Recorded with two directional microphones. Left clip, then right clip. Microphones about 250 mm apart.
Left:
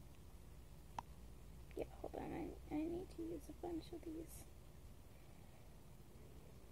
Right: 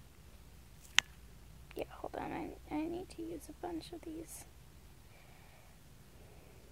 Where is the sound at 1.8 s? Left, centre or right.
Right.